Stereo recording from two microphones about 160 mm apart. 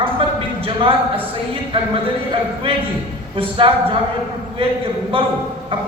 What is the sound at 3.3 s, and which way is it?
Speech, 35° right (ahead or behind).